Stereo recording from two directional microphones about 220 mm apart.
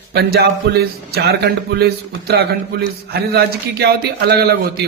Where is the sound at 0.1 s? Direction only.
45° right (ahead or behind).